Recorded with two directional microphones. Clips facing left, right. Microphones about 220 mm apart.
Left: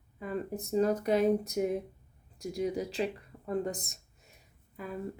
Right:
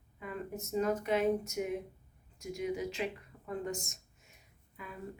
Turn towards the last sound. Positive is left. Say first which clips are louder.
# left 8 dB
turn(degrees=40)  # may be behind; listen again after turning